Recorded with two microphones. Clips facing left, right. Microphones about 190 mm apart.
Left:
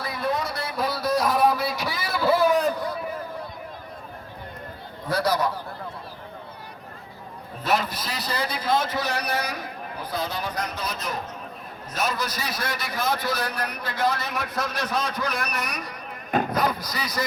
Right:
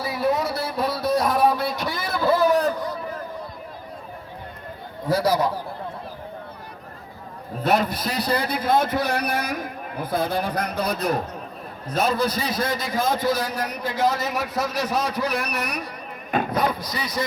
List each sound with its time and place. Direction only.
0.0 s a sound: 5° right (ahead or behind)
2.2 s vehicle: 15° right (ahead or behind)
2.5 s a sound: 15° left (ahead or behind)
5.0 s a man's voice: 10° right (ahead or behind)
7.6 s a man's voice: 60° right (ahead or behind)
12.3 s a man's voice: 55° right (ahead or behind)
12.8 s a man's voice: 90° right
13.6 s a man's voice: 10° right (ahead or behind)
14.0 s a man's voice: 90° right
14.8 s a man's voice: 5° right (ahead or behind)